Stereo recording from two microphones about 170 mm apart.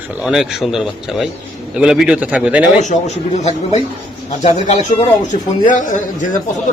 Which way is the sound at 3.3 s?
40° left (ahead or behind).